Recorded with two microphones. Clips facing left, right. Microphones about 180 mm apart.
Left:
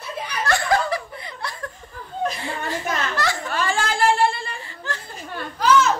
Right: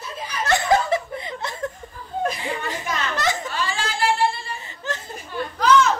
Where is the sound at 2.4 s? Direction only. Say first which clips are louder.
Even; 15° right (ahead or behind).